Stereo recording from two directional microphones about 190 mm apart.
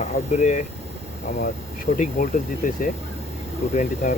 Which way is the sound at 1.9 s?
40° left (ahead or behind).